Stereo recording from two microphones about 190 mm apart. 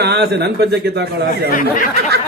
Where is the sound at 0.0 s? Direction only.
60° right (ahead or behind).